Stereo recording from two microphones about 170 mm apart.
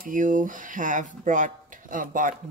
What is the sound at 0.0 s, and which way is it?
Speech, 50° right (ahead or behind).